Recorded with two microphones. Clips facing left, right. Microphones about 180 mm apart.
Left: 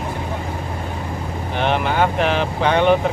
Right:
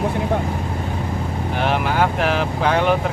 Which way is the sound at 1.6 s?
5° right (ahead or behind).